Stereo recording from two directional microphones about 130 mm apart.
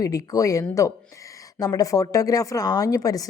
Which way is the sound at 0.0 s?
25° left (ahead or behind).